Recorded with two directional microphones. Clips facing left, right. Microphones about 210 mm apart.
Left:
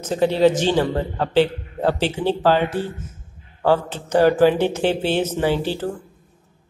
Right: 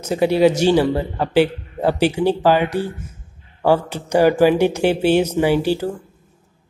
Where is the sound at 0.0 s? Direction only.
10° right (ahead or behind).